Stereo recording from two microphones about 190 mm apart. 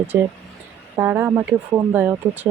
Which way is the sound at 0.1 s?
10° right (ahead or behind).